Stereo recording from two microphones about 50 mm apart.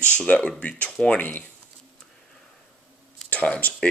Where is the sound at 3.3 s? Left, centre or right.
Left.